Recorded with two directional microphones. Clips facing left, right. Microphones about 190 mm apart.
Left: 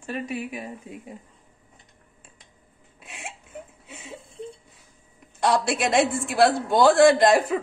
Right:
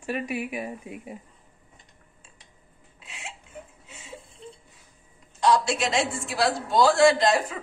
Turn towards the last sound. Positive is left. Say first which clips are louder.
# left 3 dB
turn(degrees=55)  # may be behind; listen again after turning